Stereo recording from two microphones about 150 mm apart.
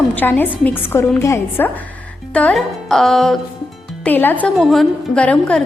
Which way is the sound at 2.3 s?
5° left (ahead or behind).